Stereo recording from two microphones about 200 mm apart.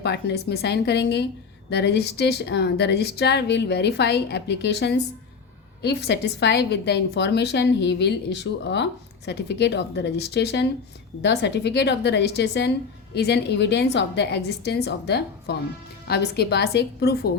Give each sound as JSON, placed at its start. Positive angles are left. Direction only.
{"t": 0.0, "sound": "a woman's voice", "side_deg": 55}